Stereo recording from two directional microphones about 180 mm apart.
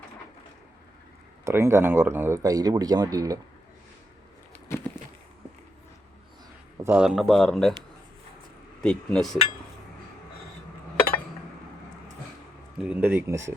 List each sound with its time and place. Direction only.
1.5 s speech: 15° right (ahead or behind)
4.5 s a sound: 10° left (ahead or behind)
6.8 s speech: 5° right (ahead or behind)
8.8 s speech: 5° left (ahead or behind)
12.9 s speech: 10° right (ahead or behind)